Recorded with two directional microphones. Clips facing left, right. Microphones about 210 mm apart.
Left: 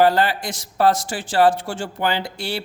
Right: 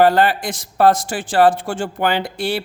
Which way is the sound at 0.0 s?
55° right (ahead or behind).